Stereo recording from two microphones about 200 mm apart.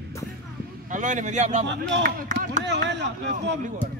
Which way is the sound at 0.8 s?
40° right (ahead or behind).